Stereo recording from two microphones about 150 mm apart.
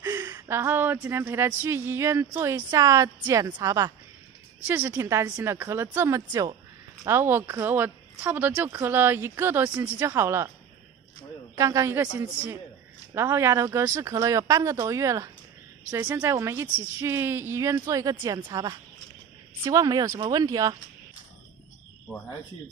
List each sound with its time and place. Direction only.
0.0 s speech: 20° right (ahead or behind)
4.6 s speech: 10° right (ahead or behind)
11.5 s speech: 20° right (ahead or behind)
13.1 s speech: 15° right (ahead or behind)
19.6 s speech: 25° right (ahead or behind)